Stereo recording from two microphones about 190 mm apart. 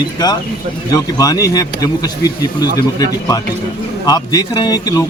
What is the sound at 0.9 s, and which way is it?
A man's voice, 20° left (ahead or behind).